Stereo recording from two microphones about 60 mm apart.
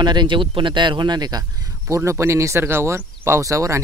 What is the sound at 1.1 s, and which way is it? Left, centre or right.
Speech, right.